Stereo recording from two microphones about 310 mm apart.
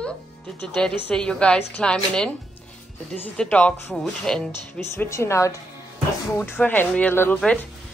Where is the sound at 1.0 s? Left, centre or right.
Centre.